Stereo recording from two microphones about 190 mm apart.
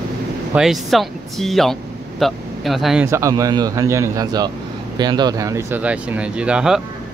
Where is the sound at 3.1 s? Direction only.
15° right (ahead or behind).